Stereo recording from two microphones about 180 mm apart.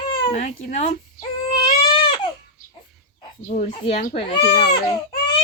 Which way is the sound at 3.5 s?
35° left (ahead or behind).